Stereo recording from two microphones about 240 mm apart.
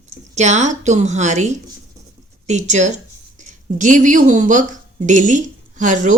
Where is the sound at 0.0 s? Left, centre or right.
Right.